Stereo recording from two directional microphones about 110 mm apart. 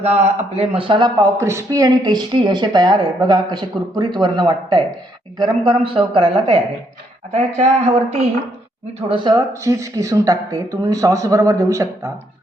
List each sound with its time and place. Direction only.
0.0 s a man's voice: 85° right; by 1.1 s 50° right (ahead or behind)
1.2 s speech: 25° right (ahead or behind); by 4.8 s 40° right (ahead or behind)
5.4 s a woman's voice: 50° right (ahead or behind)
7.3 s speech: 90° right
9.0 s a woman's voice: 55° right (ahead or behind)
9.5 s speech: 25° right (ahead or behind)